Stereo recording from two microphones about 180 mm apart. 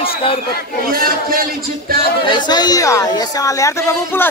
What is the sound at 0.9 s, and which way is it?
Speech, 55° right (ahead or behind).